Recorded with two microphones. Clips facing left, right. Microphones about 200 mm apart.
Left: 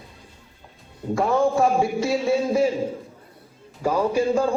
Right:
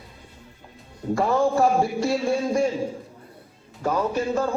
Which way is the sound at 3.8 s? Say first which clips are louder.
Left 3 dB; 10° left (ahead or behind).